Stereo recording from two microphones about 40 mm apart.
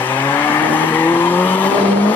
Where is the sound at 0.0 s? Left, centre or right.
Left.